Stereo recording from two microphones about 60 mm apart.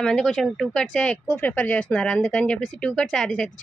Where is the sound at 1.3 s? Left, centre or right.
Left.